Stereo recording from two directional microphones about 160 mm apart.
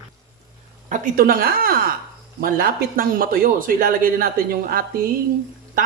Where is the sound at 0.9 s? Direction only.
55° right (ahead or behind).